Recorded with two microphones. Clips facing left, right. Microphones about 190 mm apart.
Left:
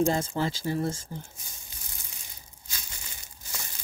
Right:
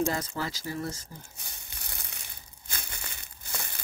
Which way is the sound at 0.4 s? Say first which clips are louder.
Left 5 dB; 25° left (ahead or behind).